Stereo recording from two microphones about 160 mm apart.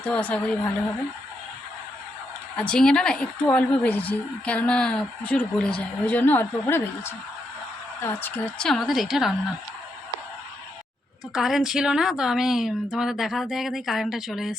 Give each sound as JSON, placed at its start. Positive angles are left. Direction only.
{"t": 0.0, "sound": "a woman's voice", "side_deg": 10}
{"t": 2.6, "sound": "a woman's voice", "side_deg": 5}
{"t": 11.3, "sound": "speech", "side_deg": 0}